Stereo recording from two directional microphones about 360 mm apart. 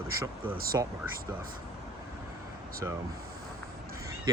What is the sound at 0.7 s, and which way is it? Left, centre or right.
Speech, centre.